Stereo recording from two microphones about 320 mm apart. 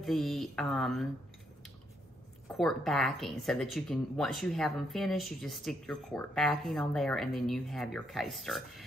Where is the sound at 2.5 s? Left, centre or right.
Centre.